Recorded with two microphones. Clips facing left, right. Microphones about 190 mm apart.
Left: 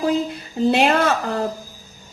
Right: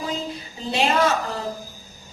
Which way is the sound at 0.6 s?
60° left (ahead or behind).